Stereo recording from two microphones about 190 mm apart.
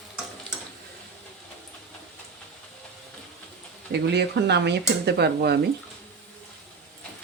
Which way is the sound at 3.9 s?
65° right (ahead or behind).